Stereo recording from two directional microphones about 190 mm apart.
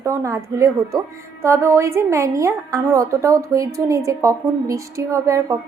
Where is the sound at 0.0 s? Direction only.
15° right (ahead or behind).